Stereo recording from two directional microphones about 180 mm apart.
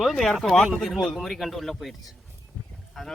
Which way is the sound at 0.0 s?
Centre (ahead or behind).